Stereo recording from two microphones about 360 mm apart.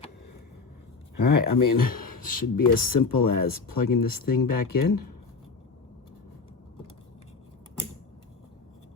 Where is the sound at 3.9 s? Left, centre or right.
Left.